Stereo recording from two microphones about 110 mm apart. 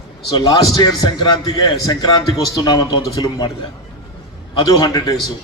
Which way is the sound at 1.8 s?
35° left (ahead or behind).